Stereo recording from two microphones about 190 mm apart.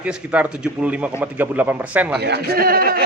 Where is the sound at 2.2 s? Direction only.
55° right (ahead or behind).